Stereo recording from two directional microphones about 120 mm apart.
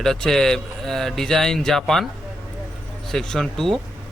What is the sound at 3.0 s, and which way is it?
Speech, 5° left (ahead or behind).